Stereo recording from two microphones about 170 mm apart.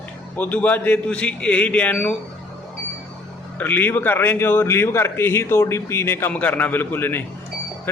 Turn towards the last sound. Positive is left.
turn(degrees=10)  # may be behind; listen again after turning